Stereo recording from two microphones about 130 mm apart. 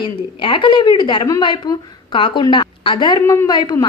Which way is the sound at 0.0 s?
40° left (ahead or behind).